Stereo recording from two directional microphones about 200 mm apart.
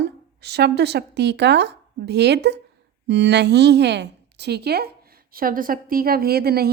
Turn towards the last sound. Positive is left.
turn(degrees=-50)  # may be behind; listen again after turning